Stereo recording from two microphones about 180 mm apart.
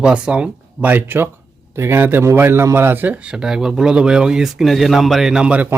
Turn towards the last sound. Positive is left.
turn(degrees=-5)  # may be behind; listen again after turning